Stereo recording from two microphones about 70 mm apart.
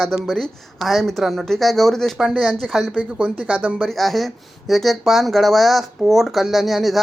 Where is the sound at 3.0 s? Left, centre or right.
Centre.